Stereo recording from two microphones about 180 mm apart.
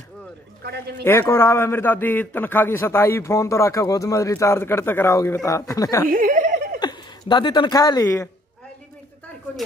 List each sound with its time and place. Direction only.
0.7 s speech: 65° right (ahead or behind)
1.0 s a man's voice: 15° left (ahead or behind)
6.0 s chuckle: 45° right (ahead or behind)
6.8 s speech: 25° left (ahead or behind)